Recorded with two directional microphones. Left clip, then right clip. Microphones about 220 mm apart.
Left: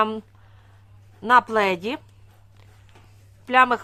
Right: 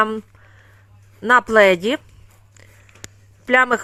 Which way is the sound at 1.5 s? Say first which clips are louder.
Right 9 dB; 15° right (ahead or behind).